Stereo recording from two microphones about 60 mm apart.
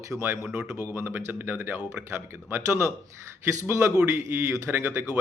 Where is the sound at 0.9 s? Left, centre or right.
Right.